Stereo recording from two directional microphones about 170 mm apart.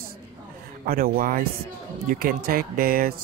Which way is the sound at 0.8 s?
60° right (ahead or behind).